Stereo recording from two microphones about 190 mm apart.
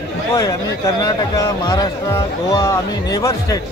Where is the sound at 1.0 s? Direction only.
20° left (ahead or behind).